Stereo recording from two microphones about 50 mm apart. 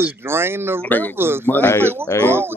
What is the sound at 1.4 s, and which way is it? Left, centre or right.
Speech, left.